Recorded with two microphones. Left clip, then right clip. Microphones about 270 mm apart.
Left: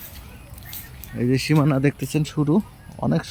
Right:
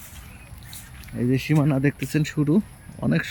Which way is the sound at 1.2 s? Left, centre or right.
Centre.